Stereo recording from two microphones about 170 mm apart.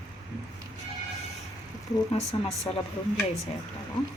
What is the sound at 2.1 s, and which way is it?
Speech, 40° left (ahead or behind).